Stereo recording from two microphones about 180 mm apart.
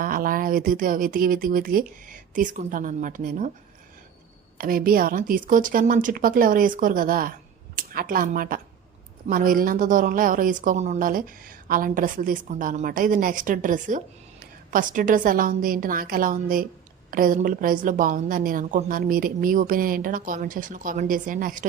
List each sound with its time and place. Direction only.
0.0 s a woman's voice: 50° right (ahead or behind)
4.5 s a woman's voice: 55° right (ahead or behind)